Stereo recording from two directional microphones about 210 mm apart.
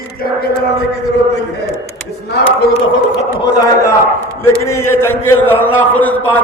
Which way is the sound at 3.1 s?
15° left (ahead or behind).